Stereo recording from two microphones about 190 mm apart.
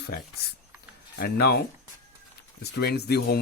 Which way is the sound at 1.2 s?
60° left (ahead or behind).